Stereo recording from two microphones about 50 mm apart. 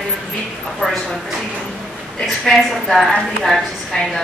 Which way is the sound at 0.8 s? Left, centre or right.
Centre.